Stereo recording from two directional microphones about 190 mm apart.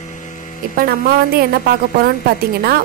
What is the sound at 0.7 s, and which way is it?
A woman's voice, 50° right (ahead or behind).